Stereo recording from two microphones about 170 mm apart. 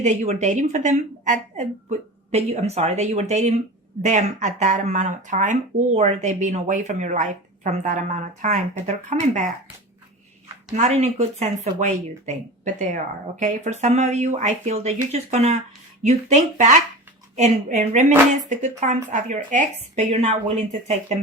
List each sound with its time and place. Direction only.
0.0 s speech: 45° right (ahead or behind)
10.7 s a woman's voice: 45° right (ahead or behind)